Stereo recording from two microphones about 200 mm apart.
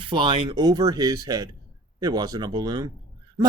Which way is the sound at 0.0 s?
25° right (ahead or behind).